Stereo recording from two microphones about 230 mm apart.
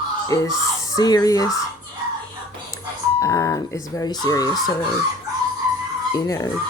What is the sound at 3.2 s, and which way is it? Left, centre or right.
Speech, centre.